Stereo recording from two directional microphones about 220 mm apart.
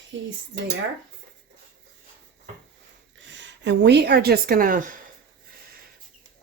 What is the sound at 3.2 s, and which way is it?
A woman's voice, 55° right (ahead or behind).